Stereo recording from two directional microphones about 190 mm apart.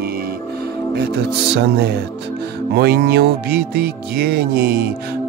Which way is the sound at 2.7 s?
55° right (ahead or behind).